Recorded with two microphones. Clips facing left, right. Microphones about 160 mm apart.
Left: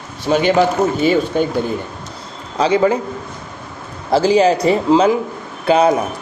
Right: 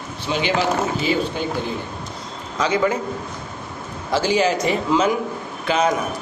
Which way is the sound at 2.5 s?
30° left (ahead or behind).